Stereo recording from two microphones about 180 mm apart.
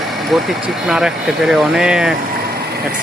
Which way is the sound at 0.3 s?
Centre (ahead or behind).